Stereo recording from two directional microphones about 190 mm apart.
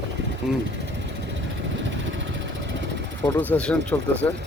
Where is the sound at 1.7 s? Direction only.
80° right.